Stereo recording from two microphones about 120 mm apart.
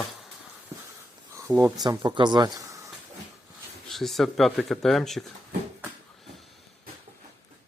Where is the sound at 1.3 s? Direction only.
25° right (ahead or behind).